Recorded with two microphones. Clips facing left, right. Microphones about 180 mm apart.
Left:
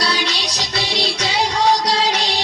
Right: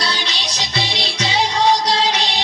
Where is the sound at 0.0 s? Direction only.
Centre (ahead or behind).